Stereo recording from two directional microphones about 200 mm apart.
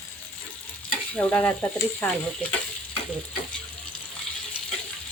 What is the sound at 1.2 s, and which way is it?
Speech, 5° left (ahead or behind).